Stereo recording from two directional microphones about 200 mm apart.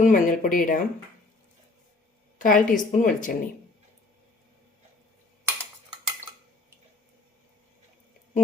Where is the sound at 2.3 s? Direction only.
40° left (ahead or behind).